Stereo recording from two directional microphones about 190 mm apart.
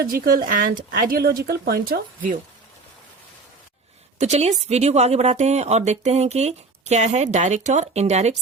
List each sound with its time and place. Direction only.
0.0 s speech: 50° right (ahead or behind)
4.2 s speech: 35° right (ahead or behind)